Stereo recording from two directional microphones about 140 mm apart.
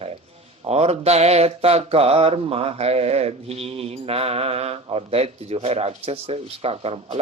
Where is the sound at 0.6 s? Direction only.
50° right (ahead or behind).